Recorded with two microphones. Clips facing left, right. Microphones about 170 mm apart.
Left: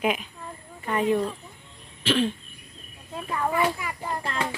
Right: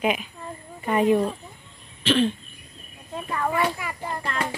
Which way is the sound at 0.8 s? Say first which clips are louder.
Right 4 dB; 15° right (ahead or behind).